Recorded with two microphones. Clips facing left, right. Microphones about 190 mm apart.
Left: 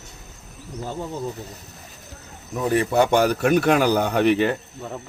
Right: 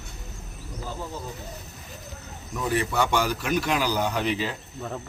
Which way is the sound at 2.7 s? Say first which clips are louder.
Left 6 dB; 50° left (ahead or behind).